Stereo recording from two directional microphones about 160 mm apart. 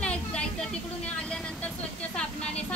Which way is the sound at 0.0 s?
5° left (ahead or behind).